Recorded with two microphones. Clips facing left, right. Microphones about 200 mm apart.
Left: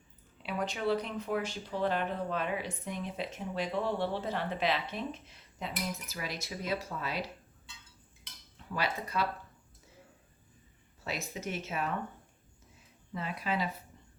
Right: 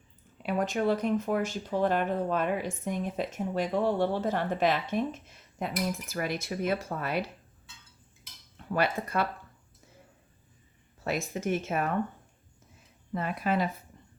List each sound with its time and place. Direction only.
0.4 s speech: 45° right (ahead or behind)
8.7 s speech: 55° right (ahead or behind)
11.0 s speech: 50° right (ahead or behind)
13.1 s speech: 50° right (ahead or behind)